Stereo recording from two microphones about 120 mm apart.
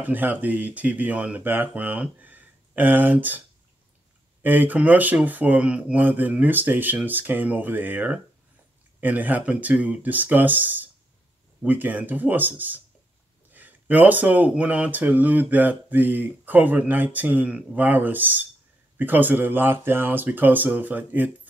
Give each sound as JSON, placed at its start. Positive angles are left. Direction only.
{"t": 0.0, "sound": "speech", "side_deg": -15}